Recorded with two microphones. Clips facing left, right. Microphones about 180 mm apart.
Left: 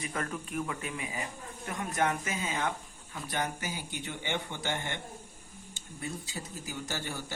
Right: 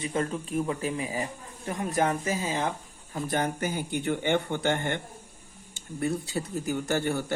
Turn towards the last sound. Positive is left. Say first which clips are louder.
# right 10 dB
turn(degrees=-60)  # may be behind; listen again after turning